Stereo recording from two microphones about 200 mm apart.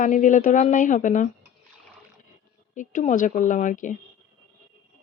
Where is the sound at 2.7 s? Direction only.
40° left (ahead or behind).